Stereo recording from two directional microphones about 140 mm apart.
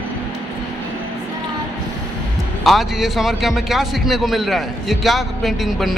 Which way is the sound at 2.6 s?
Centre (ahead or behind).